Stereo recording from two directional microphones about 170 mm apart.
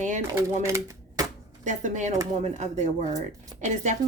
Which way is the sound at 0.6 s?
15° right (ahead or behind).